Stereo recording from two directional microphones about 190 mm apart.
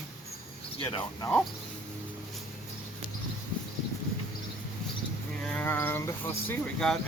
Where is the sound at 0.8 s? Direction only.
25° left (ahead or behind).